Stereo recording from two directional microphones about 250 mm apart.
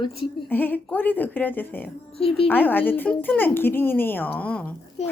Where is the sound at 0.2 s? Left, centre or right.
Centre.